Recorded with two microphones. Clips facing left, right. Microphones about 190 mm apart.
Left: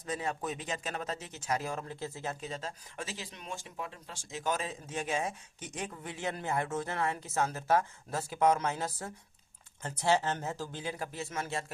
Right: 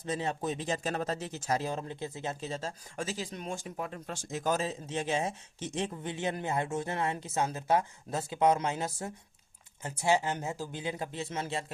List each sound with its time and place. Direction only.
0.0 s speech: 25° right (ahead or behind)
1.6 s speech: 20° right (ahead or behind)
2.6 s speech: 40° right (ahead or behind)
4.4 s speech: 30° right (ahead or behind)